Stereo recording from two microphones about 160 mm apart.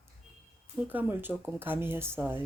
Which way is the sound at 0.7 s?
10° right (ahead or behind).